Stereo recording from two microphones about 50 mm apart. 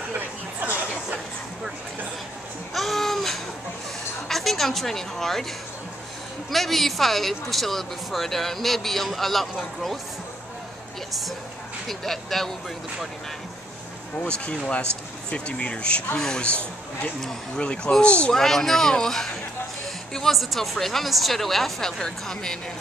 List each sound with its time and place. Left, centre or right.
0.1 s chatter: right
2.7 s babbling: centre
4.3 s a woman's voice: centre
6.5 s speech: centre
11.9 s speech: centre
14.2 s speech: left
17.6 s speech: left
18.3 s speech: centre
20.3 s speech: centre